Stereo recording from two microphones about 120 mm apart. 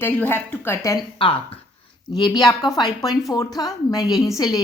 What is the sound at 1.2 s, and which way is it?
Speech, 50° left (ahead or behind).